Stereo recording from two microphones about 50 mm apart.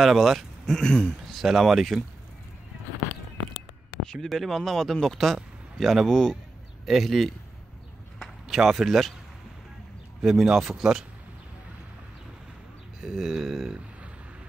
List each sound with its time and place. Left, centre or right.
0.0 s speech: centre
0.7 s speech: centre
1.2 s speech: centre
4.0 s speech: centre
6.9 s mantra: centre
8.5 s mantra: centre
10.2 s speech: centre
13.0 s mantra: centre